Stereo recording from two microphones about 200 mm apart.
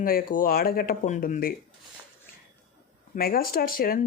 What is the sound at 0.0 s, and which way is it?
Speech, 45° left (ahead or behind).